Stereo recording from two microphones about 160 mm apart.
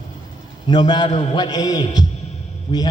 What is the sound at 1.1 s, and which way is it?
Mantra, 45° left (ahead or behind).